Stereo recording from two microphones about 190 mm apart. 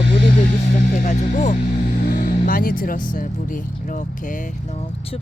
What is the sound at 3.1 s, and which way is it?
Speech, 45° left (ahead or behind).